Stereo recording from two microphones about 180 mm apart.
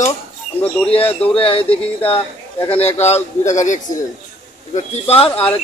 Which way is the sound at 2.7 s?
35° left (ahead or behind).